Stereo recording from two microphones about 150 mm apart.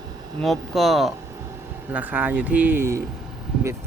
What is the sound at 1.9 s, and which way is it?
Speech, 10° right (ahead or behind).